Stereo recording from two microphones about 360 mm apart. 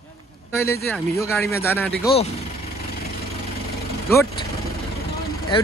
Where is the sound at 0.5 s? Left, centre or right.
Centre.